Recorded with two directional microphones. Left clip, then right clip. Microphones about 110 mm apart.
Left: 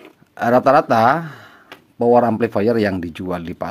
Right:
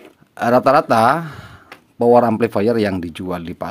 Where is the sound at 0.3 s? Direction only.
10° right (ahead or behind).